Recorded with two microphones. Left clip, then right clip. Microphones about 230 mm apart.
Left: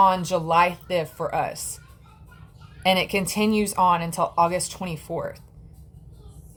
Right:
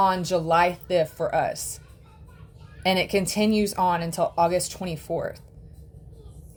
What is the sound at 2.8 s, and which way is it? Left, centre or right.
Speech, centre.